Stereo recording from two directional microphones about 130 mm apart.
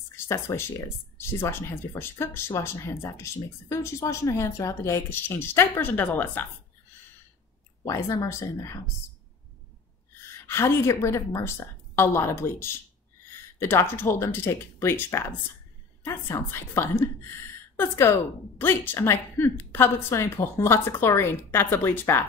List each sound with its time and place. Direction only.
0.1 s speech: 20° left (ahead or behind)
7.8 s speech: 25° left (ahead or behind)
10.4 s a woman's voice: 20° left (ahead or behind)